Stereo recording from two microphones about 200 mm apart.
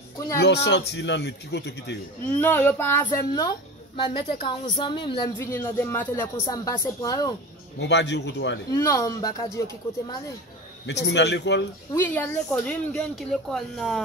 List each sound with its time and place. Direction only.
0.4 s speech: 60° left (ahead or behind)
2.3 s a woman's voice: 10° left (ahead or behind)
7.8 s speech: 60° left (ahead or behind)
8.7 s speech: 15° left (ahead or behind)
10.9 s speech: 60° left (ahead or behind)
11.9 s speech: 10° left (ahead or behind)